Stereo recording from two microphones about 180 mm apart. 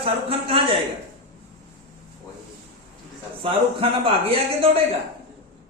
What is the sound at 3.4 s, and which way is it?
A man's voice, 30° right (ahead or behind).